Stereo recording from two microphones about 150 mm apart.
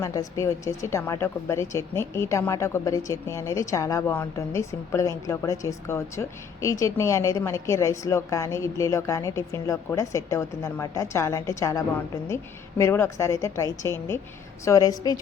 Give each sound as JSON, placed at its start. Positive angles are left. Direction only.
{"t": 0.0, "sound": "a woman's voice", "side_deg": 20}